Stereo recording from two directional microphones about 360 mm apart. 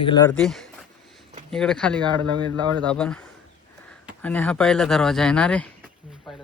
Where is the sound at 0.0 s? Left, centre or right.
Centre.